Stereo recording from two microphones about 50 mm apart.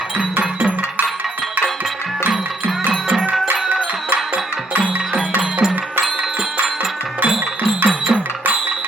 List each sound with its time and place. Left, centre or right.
0.3 s music: right
4.7 s music: right
7.3 s music: right
7.9 s music: centre